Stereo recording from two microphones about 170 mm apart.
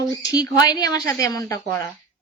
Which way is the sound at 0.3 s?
20° left (ahead or behind).